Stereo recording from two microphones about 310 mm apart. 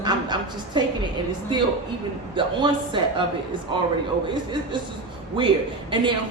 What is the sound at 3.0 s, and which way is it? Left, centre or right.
Speech, centre.